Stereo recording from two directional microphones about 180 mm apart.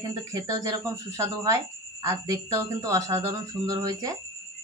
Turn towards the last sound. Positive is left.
turn(degrees=-20)  # may be behind; listen again after turning